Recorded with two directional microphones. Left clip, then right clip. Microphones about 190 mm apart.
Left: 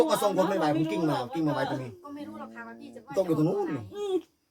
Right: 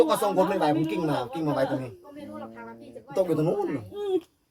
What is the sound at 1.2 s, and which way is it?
Speech, 10° right (ahead or behind).